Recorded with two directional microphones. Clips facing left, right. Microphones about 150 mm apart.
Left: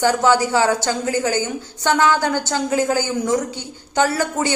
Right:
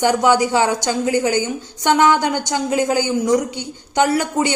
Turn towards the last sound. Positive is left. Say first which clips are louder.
# right 2 dB
turn(degrees=-20)  # may be behind; listen again after turning